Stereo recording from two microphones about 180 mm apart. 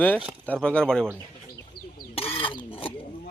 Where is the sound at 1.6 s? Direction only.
55° left (ahead or behind).